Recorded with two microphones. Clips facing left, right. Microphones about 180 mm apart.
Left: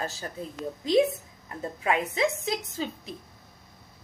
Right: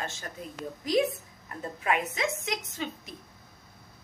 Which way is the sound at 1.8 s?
30° left (ahead or behind).